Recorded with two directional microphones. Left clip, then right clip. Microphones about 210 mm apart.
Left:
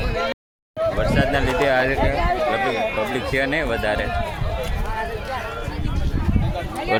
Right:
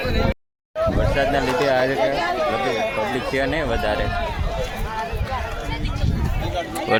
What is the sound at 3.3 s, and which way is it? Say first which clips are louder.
Speech: even; centre (ahead or behind).